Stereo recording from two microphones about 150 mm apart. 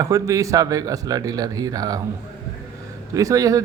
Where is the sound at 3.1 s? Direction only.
25° right (ahead or behind).